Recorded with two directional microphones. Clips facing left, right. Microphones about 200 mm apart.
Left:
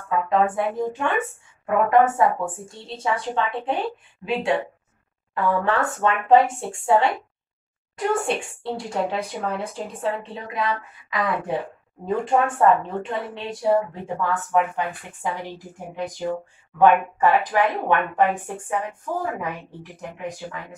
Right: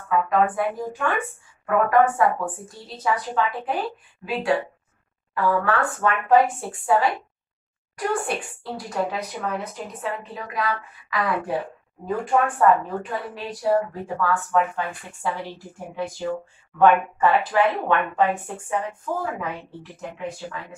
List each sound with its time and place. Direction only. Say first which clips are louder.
0.3 s a woman's voice: left 3 dB; 25° left (ahead or behind)